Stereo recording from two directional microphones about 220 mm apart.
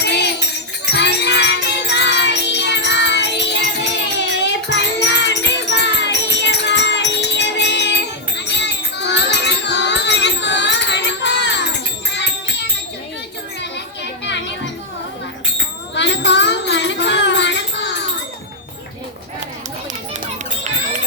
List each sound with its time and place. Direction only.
0.0 s music: 50° left (ahead or behind)
13.6 s children playing: 50° left (ahead or behind)
16.0 s music: 55° left (ahead or behind)